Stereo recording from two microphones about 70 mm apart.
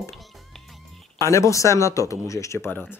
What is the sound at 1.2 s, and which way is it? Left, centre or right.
Speech, left.